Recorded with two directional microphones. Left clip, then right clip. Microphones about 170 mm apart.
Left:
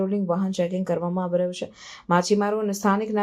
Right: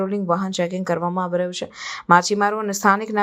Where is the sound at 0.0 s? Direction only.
20° right (ahead or behind).